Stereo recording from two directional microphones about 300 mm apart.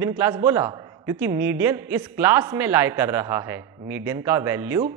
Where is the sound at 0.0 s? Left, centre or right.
Centre.